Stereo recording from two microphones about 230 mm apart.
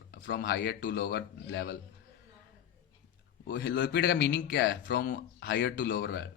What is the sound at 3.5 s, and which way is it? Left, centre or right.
Speech, left.